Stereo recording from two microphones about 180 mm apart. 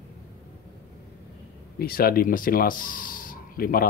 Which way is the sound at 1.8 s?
55° left (ahead or behind).